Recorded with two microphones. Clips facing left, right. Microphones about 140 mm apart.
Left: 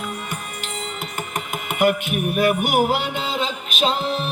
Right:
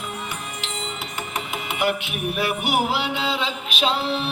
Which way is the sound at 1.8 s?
45° left (ahead or behind).